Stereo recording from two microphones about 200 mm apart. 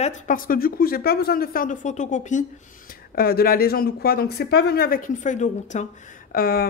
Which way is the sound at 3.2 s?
50° left (ahead or behind).